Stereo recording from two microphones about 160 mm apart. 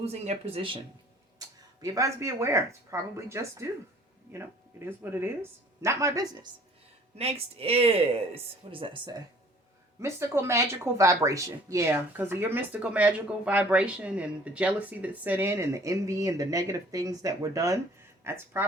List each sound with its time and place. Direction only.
0.0 s speech: 40° right (ahead or behind)
1.4 s speech: 20° right (ahead or behind)
4.9 s speech: 15° right (ahead or behind)
7.2 s speech: 40° right (ahead or behind)
10.0 s speech: 15° right (ahead or behind)